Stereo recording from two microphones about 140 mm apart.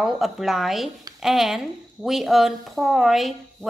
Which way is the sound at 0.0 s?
5° right (ahead or behind).